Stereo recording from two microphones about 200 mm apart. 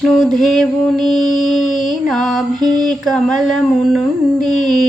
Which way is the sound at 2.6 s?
20° right (ahead or behind).